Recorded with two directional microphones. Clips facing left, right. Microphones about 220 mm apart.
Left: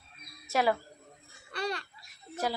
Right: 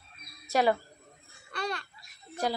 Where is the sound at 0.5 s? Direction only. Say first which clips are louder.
Right 2 dB; centre (ahead or behind).